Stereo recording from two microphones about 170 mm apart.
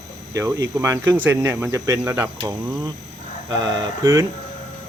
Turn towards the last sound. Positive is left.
turn(degrees=-20)  # may be behind; listen again after turning